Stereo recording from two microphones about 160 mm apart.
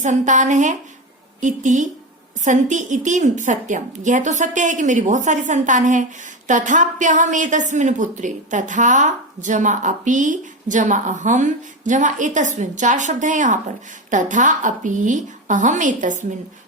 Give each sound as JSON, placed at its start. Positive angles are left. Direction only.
{"t": 0.0, "sound": "a woman's voice", "side_deg": -50}